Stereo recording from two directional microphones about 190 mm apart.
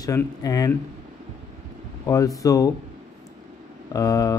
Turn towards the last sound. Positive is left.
turn(degrees=20)  # may be behind; listen again after turning